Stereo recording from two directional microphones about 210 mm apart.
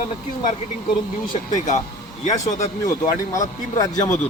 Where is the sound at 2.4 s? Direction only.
15° left (ahead or behind).